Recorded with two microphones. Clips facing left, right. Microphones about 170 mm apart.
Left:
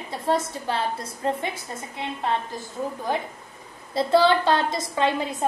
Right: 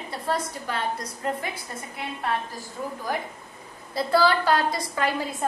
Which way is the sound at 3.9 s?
25° left (ahead or behind).